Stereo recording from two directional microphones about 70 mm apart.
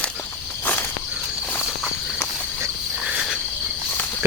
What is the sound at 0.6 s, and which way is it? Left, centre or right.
Insect, left.